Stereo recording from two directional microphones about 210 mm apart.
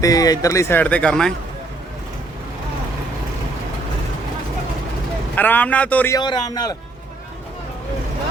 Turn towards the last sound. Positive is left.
turn(degrees=20)  # may be behind; listen again after turning